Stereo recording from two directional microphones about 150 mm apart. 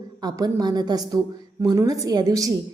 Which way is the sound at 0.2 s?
25° right (ahead or behind).